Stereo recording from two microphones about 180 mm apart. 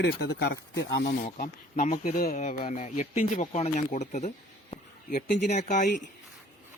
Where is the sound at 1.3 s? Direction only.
50° left (ahead or behind).